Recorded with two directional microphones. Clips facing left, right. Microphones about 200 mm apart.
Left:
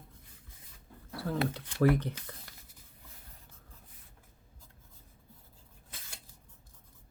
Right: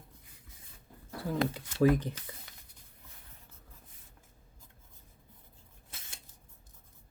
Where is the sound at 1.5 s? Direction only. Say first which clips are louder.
Right 1 dB; 15° right (ahead or behind).